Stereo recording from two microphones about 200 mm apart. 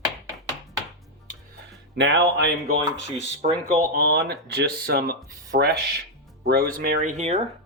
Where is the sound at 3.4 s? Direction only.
40° right (ahead or behind).